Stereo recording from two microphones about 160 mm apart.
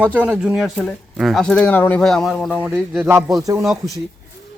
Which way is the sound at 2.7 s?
15° right (ahead or behind).